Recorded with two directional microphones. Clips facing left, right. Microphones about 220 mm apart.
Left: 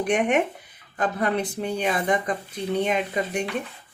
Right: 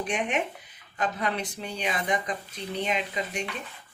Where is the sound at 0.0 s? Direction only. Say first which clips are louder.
Left 7 dB; 60° left (ahead or behind).